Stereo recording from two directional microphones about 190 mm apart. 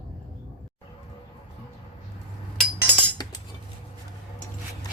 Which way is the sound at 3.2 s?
20° left (ahead or behind).